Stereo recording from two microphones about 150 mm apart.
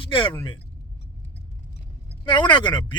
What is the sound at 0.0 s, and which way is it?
Speech, 35° left (ahead or behind).